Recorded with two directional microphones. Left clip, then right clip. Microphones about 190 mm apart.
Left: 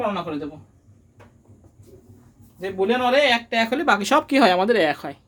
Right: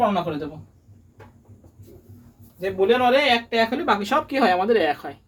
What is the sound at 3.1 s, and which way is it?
Speech, 50° left (ahead or behind).